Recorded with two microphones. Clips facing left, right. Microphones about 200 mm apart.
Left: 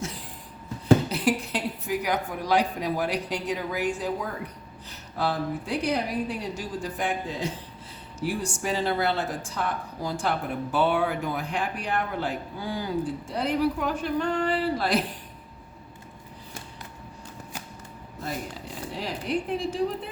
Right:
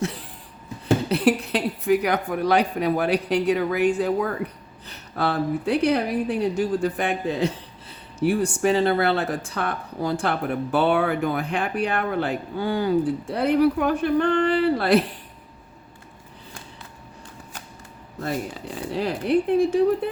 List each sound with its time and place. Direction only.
1.1 s speech: 65° right (ahead or behind)
18.9 s speech: 60° right (ahead or behind)